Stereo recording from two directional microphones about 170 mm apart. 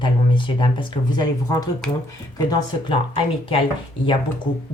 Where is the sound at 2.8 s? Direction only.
30° left (ahead or behind).